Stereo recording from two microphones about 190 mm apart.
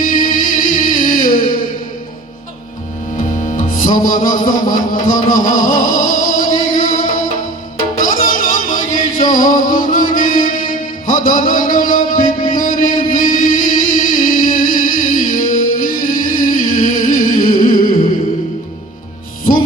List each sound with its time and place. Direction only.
0.0 s music: 45° left (ahead or behind)
3.5 s music: 45° left (ahead or behind)